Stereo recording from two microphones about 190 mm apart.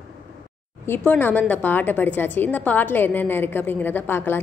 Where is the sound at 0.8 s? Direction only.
10° left (ahead or behind).